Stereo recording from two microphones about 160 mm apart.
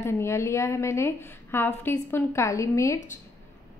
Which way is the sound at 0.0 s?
15° left (ahead or behind).